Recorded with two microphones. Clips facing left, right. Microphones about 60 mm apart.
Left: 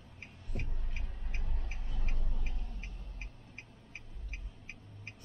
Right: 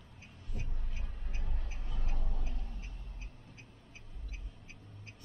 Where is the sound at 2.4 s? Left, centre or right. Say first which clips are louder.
Even; left.